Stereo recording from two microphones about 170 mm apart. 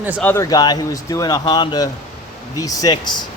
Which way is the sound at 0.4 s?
25° left (ahead or behind).